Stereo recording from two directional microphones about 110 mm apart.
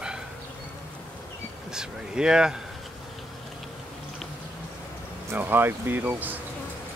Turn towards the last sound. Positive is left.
turn(degrees=-15)  # may be behind; listen again after turning